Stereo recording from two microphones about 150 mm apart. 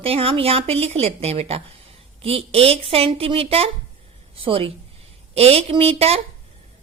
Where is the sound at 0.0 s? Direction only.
40° right (ahead or behind).